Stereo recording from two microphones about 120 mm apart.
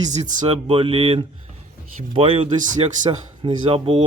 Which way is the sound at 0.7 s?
45° right (ahead or behind).